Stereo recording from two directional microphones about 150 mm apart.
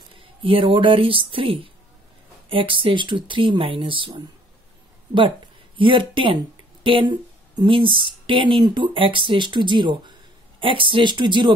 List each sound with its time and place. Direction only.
0.4 s speech: 35° right (ahead or behind)
5.8 s speech: 35° right (ahead or behind)